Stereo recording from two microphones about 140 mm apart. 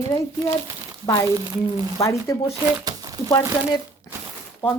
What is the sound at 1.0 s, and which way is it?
Speech, 25° left (ahead or behind).